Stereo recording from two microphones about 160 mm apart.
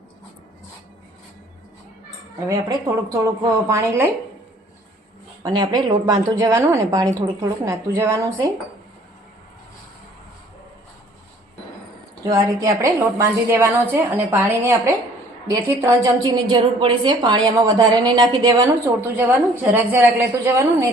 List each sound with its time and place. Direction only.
2.5 s a woman's voice: 20° right (ahead or behind)
5.4 s a woman's voice: 25° right (ahead or behind)
12.3 s a woman's voice: 20° right (ahead or behind)